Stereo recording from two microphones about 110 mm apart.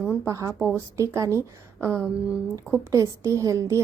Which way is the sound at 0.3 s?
30° right (ahead or behind).